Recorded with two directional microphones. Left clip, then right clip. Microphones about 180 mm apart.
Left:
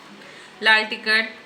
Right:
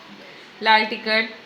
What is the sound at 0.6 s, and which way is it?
Speech, 55° right (ahead or behind).